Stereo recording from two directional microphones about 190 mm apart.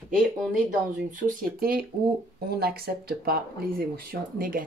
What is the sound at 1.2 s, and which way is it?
Speech, 45° right (ahead or behind).